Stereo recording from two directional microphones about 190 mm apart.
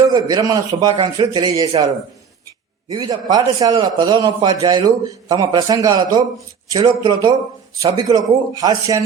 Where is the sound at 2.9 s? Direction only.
20° right (ahead or behind).